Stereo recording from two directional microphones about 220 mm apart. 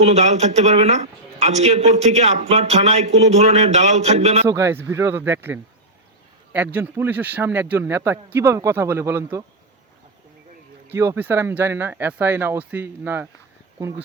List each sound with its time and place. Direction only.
0.0 s a man's voice: 30° right (ahead or behind)
4.4 s speech: 10° right (ahead or behind)
10.9 s speech: 10° right (ahead or behind)